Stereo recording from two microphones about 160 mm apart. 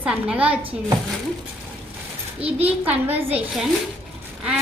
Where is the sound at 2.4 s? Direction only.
40° right (ahead or behind).